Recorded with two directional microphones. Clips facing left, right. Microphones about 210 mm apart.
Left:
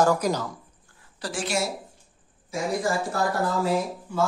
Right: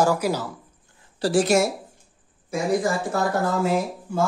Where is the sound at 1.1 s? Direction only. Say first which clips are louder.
Right 12 dB; 30° right (ahead or behind).